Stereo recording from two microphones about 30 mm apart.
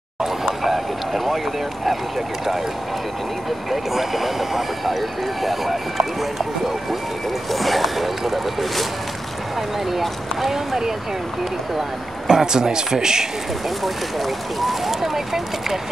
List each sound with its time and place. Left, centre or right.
0.7 s speech: centre
3.7 s speech: centre
7.5 s speech: centre
9.8 s speech: centre
12.3 s speech: right
13.8 s speech: centre